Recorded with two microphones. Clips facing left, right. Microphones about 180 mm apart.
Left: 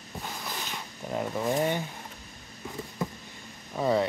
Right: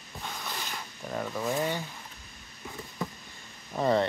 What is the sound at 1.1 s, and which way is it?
Speech, 20° left (ahead or behind).